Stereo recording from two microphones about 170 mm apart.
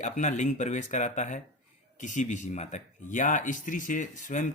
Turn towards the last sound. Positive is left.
turn(degrees=50)  # may be behind; listen again after turning